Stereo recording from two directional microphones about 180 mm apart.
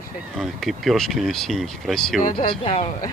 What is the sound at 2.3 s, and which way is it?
Speech, 30° left (ahead or behind).